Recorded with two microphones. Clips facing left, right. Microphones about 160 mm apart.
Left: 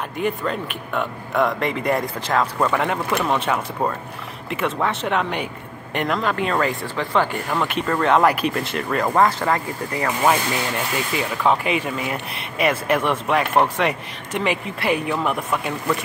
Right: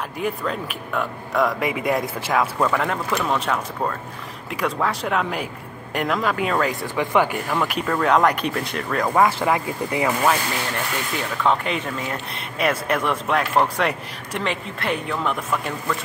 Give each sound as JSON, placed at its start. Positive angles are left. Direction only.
{"t": 0.2, "sound": "speech", "side_deg": 0}
{"t": 6.8, "sound": "speech", "side_deg": -15}
{"t": 7.4, "sound": "speech", "side_deg": 0}
{"t": 11.1, "sound": "speech", "side_deg": 5}